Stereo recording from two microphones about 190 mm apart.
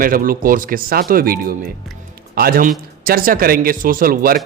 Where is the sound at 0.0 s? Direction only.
50° right (ahead or behind).